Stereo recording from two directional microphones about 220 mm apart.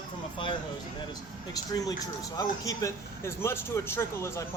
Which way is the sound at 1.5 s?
15° left (ahead or behind).